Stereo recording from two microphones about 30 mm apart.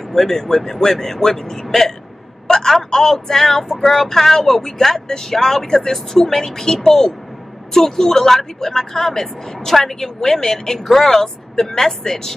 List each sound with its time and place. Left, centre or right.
0.1 s speech: centre
2.4 s a sound: centre
2.9 s speech: centre